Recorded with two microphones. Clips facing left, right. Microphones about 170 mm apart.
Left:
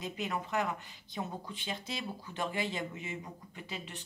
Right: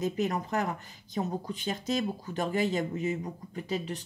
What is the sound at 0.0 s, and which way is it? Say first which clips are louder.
Speech: right 7 dB; 40° right (ahead or behind).